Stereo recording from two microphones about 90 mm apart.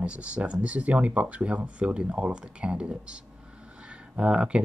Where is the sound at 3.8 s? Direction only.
10° right (ahead or behind).